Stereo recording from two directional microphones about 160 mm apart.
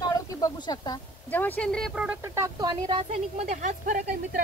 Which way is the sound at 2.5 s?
30° right (ahead or behind).